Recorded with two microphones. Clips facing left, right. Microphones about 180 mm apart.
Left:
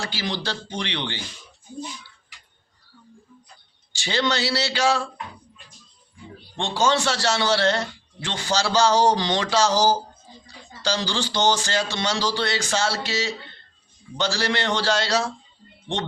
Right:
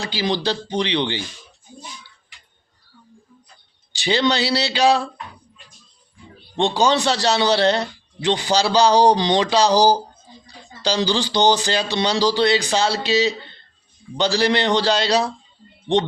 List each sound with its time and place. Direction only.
0.0 s a man's voice: 15° right (ahead or behind)
3.9 s a man's voice: 15° right (ahead or behind)
6.7 s a man's voice: 15° right (ahead or behind)